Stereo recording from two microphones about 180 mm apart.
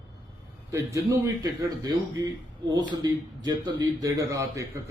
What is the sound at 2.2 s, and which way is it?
A man's voice, 20° right (ahead or behind).